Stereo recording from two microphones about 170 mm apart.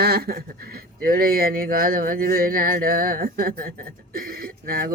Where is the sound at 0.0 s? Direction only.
65° right (ahead or behind).